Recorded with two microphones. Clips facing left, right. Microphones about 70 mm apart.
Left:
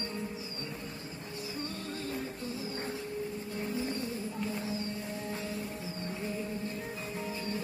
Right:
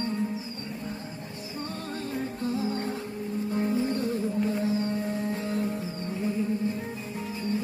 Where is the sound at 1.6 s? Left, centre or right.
Right.